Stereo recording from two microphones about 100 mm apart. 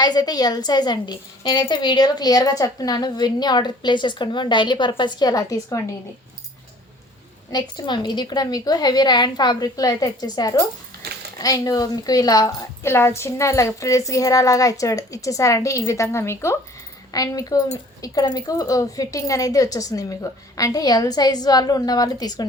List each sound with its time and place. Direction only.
0.0 s a woman's voice: 40° left (ahead or behind)
5.3 s a woman's voice: 35° left (ahead or behind)
7.5 s a woman's voice: 45° left (ahead or behind); by 16.6 s 25° left (ahead or behind)
17.1 s a woman's voice: 35° left (ahead or behind)